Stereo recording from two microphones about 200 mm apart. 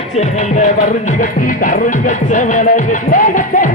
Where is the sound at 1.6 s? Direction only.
40° left (ahead or behind).